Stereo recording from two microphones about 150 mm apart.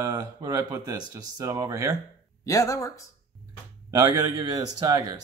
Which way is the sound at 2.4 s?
25° left (ahead or behind).